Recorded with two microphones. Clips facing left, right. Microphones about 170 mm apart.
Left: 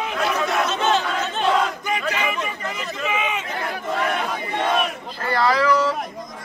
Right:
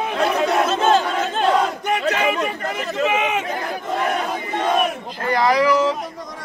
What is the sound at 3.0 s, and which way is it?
Chatter, 55° right (ahead or behind).